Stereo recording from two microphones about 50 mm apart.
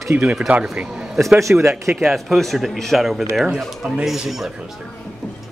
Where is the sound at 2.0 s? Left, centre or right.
Centre.